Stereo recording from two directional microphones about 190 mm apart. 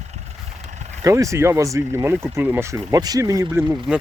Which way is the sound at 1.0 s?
15° right (ahead or behind).